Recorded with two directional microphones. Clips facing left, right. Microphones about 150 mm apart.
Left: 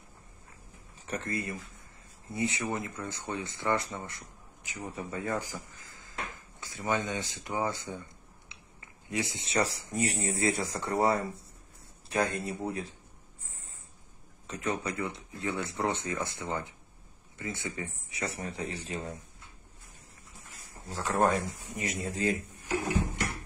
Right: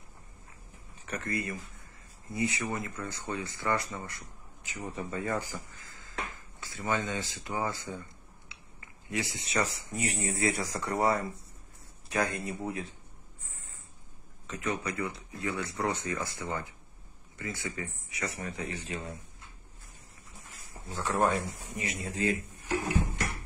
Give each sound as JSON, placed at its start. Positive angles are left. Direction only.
{"t": 1.0, "sound": "speech", "side_deg": 25}
{"t": 9.1, "sound": "speech", "side_deg": 20}
{"t": 14.5, "sound": "speech", "side_deg": 35}
{"t": 20.9, "sound": "speech", "side_deg": 40}